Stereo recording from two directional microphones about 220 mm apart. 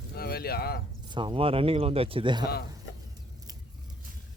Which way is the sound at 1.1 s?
20° right (ahead or behind).